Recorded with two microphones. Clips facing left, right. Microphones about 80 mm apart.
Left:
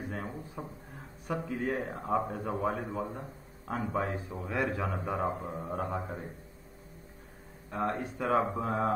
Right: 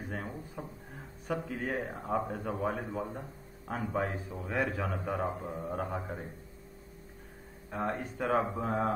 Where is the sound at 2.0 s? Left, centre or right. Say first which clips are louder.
Left 3 dB; centre.